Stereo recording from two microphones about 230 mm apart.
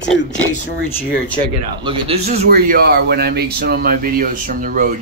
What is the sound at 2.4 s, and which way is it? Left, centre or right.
Speech, right.